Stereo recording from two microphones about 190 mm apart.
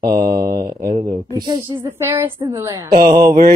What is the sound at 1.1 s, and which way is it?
A woman's voice, 20° right (ahead or behind).